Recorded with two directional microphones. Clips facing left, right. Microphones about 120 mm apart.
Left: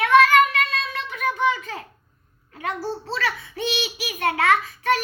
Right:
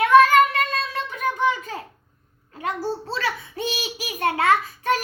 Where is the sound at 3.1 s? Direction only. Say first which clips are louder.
Even; 30° right (ahead or behind).